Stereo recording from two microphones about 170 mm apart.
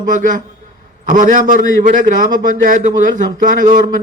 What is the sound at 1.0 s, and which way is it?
A man's voice, 50° right (ahead or behind).